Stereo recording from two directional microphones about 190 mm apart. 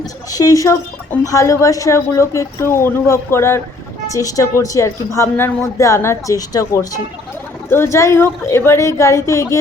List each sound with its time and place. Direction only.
0.3 s a woman's voice: 20° left (ahead or behind)